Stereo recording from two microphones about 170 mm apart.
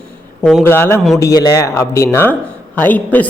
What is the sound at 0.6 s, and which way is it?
A man's voice, 15° left (ahead or behind).